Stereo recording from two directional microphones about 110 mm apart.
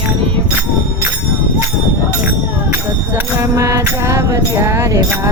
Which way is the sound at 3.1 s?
25° right (ahead or behind).